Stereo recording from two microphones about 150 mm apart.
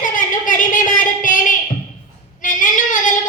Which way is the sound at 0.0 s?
60° left (ahead or behind).